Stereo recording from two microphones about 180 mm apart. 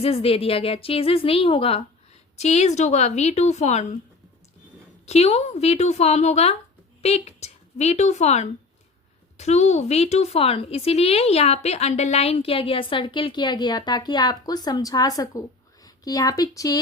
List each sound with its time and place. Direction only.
0.0 s a woman's voice: 35° left (ahead or behind)
5.0 s a woman's voice: 35° left (ahead or behind)